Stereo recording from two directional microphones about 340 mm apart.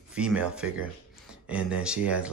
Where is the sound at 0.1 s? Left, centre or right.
Centre.